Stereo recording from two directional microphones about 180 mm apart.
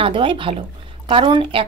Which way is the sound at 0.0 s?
30° right (ahead or behind).